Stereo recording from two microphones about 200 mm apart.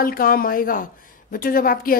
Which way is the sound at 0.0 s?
45° left (ahead or behind).